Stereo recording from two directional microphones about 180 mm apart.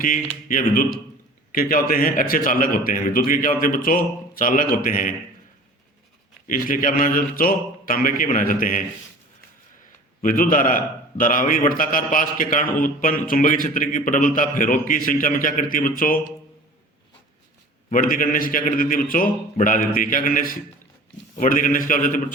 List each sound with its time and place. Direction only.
0.4 s a man's voice: 50° left (ahead or behind)
6.5 s a man's voice: 50° left (ahead or behind)
10.2 s a man's voice: 50° left (ahead or behind)
17.9 s a man's voice: 50° left (ahead or behind)